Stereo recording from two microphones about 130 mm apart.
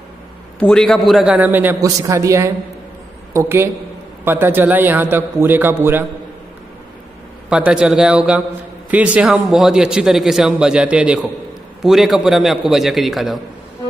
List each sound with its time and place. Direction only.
0.6 s a man's voice: 5° left (ahead or behind)
1.3 s a man's voice: 15° right (ahead or behind)
7.4 s a man's voice: 5° right (ahead or behind)